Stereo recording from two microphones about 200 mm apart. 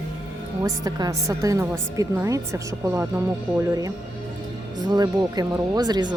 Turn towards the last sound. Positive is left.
turn(degrees=-20)  # may be behind; listen again after turning